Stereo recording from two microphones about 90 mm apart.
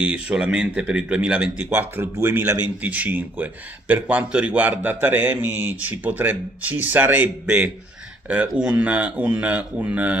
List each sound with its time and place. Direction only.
0.0 s speech: 10° right (ahead or behind)